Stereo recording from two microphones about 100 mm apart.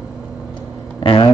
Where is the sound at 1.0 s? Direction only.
65° left (ahead or behind).